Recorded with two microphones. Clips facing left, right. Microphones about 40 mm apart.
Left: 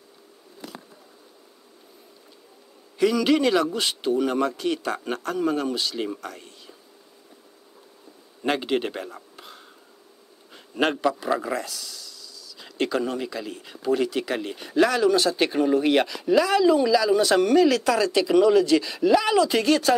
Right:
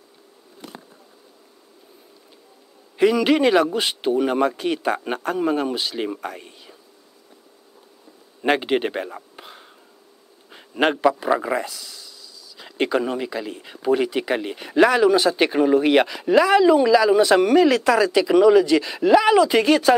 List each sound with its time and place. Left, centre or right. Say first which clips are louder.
3.0 s a man's voice: right 3 dB; right
8.4 s speech: right 4 dB; right